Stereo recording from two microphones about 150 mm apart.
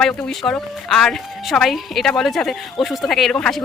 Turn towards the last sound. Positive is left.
turn(degrees=5)  # may be behind; listen again after turning